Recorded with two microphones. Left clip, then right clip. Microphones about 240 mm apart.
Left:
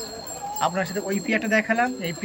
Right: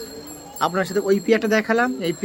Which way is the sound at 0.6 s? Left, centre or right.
Centre.